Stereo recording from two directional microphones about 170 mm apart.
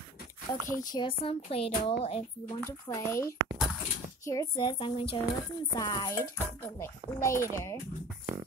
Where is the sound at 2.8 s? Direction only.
15° left (ahead or behind).